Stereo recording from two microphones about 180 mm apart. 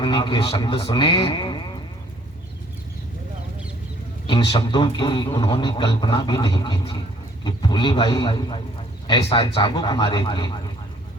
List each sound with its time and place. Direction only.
0.0 s a man's voice: 25° left (ahead or behind)
4.3 s a man's voice: 25° left (ahead or behind)